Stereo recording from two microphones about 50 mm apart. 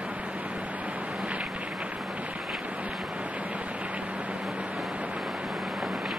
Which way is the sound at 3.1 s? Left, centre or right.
Right.